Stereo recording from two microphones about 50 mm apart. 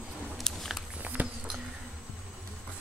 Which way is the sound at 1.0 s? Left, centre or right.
Right.